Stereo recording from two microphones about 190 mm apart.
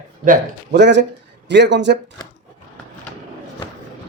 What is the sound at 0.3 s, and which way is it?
Speech, 65° right (ahead or behind).